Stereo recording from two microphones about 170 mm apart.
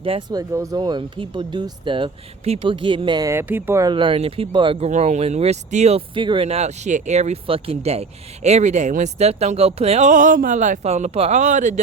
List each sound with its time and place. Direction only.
0.0 s speech: 30° right (ahead or behind)
3.8 s speech: 30° right (ahead or behind)
4.9 s speech: 40° right (ahead or behind)
6.1 s speech: 30° right (ahead or behind); by 11.7 s 45° right (ahead or behind)